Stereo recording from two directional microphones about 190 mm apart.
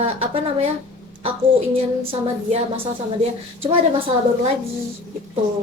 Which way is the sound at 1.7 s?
30° right (ahead or behind).